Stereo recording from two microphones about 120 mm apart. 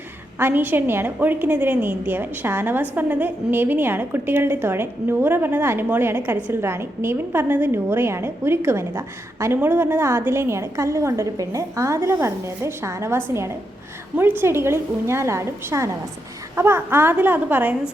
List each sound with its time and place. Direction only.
0.3 s a woman's voice: 20° right (ahead or behind)